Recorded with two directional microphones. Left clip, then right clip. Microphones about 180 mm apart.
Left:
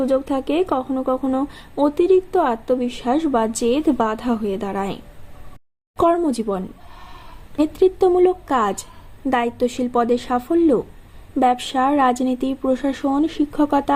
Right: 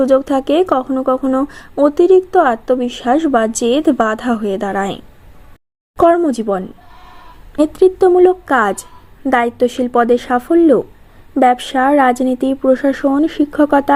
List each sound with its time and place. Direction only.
0.0 s a woman's voice: 30° right (ahead or behind)
6.0 s a woman's voice: 20° right (ahead or behind)